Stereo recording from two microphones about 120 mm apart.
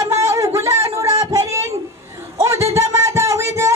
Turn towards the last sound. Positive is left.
turn(degrees=-25)  # may be behind; listen again after turning